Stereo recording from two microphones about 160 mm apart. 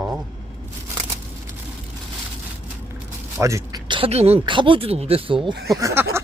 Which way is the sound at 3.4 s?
20° right (ahead or behind).